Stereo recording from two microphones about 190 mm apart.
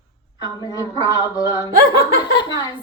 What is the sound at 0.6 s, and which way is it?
A man's voice, 20° left (ahead or behind).